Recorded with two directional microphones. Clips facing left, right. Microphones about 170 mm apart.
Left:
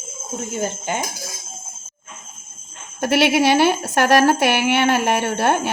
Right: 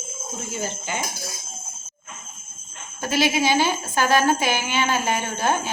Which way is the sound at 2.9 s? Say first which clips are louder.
Left 5 dB; 70° left (ahead or behind).